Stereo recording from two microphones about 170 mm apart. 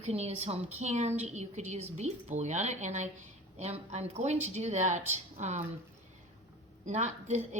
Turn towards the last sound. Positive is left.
turn(degrees=-45)  # may be behind; listen again after turning